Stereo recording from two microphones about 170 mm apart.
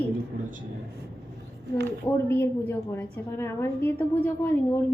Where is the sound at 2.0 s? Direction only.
15° left (ahead or behind).